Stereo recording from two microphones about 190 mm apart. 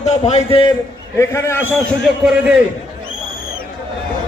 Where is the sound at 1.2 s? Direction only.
15° left (ahead or behind).